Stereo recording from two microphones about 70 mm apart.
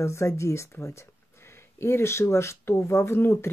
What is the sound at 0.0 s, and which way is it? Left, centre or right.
Speech, left.